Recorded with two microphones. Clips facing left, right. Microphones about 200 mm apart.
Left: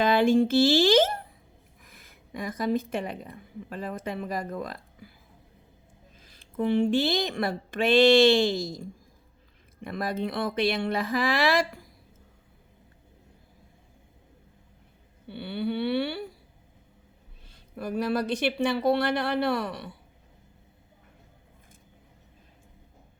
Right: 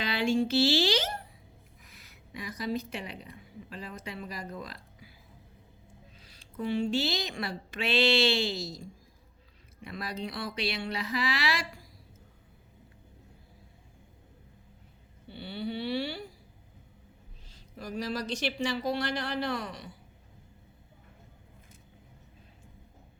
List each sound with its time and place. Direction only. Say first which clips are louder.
0.0 s a woman's voice: left 7 dB; 50° left (ahead or behind)
6.1 s speech: left 8 dB; 50° left (ahead or behind)
15.3 s speech: left 6 dB; 60° left (ahead or behind)
17.5 s speech: left 6 dB; 55° left (ahead or behind)